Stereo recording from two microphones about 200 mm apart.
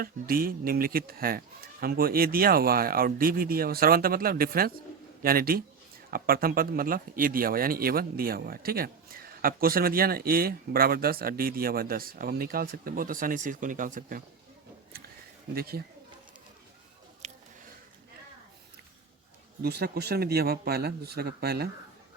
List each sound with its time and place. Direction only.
0.0 s speech: 45° right (ahead or behind)
15.5 s speech: 50° right (ahead or behind)
17.2 s a sound: 35° right (ahead or behind)
19.6 s speech: 50° right (ahead or behind)